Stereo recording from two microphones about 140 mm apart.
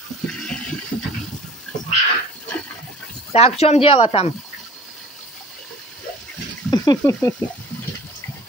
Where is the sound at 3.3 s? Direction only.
45° left (ahead or behind).